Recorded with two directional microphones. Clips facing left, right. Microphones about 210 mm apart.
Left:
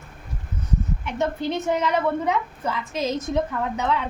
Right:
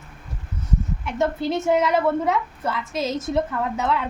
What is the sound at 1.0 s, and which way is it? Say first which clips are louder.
A woman's voice: right 3 dB; centre (ahead or behind).